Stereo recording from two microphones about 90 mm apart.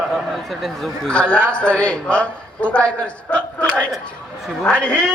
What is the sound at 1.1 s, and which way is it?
A man's voice, 10° left (ahead or behind).